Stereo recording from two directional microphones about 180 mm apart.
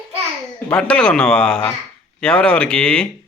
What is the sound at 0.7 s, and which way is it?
Speech, 5° left (ahead or behind).